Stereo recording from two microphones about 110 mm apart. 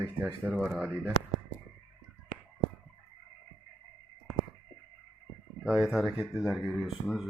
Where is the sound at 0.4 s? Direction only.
5° right (ahead or behind).